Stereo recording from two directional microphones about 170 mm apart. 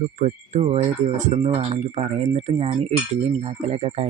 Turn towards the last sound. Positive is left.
turn(degrees=-40)  # may be behind; listen again after turning